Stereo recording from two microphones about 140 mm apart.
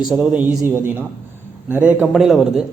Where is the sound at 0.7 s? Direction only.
15° right (ahead or behind).